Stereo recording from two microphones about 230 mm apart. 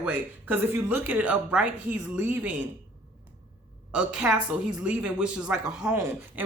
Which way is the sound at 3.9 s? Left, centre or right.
Centre.